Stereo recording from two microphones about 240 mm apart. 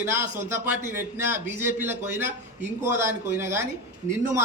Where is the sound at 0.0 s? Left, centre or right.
Centre.